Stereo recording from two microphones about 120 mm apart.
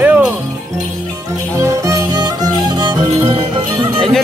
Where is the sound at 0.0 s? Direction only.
10° right (ahead or behind).